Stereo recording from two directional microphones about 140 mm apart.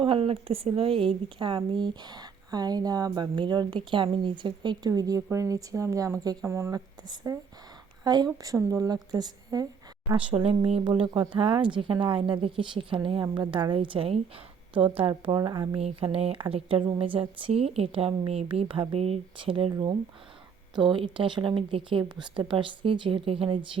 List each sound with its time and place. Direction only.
0.0 s a woman's voice: 40° right (ahead or behind)
10.2 s a woman's voice: 40° right (ahead or behind)
15.8 s a woman's voice: 45° right (ahead or behind)